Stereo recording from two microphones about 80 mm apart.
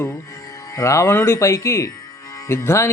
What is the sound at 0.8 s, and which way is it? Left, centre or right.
Speech, left.